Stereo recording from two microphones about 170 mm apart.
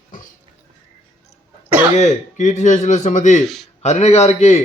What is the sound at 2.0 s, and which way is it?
Speech, 45° left (ahead or behind).